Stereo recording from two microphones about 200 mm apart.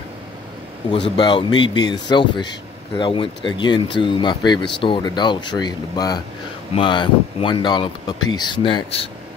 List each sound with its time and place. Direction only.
1.1 s speech: 25° left (ahead or behind)